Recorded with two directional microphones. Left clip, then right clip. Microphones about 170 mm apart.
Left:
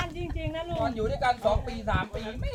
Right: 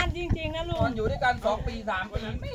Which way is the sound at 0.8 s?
Centre (ahead or behind).